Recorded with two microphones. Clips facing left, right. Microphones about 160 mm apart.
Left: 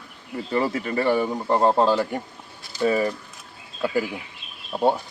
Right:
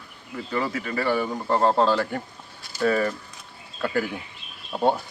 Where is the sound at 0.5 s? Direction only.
30° left (ahead or behind).